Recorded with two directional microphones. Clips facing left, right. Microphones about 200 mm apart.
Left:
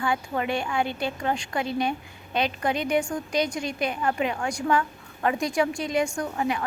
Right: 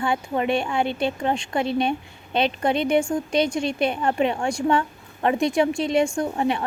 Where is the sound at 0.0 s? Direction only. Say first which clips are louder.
Right 3 dB; 25° right (ahead or behind).